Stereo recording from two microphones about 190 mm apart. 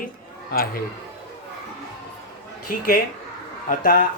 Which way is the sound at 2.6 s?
50° left (ahead or behind).